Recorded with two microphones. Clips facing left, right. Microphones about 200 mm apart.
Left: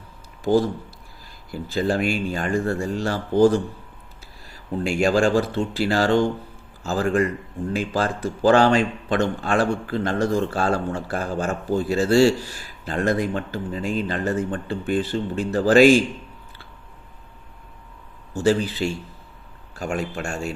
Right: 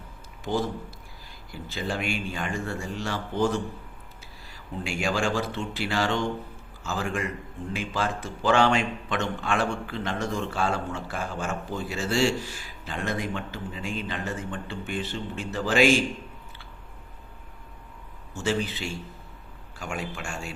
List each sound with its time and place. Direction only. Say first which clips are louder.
0.5 s speech: left 8 dB; 40° left (ahead or behind)
4.8 s speech: left 8 dB; 40° left (ahead or behind)
18.3 s speech: left 8 dB; 35° left (ahead or behind)